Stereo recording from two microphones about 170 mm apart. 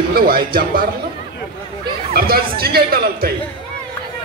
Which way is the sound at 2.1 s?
65° right (ahead or behind).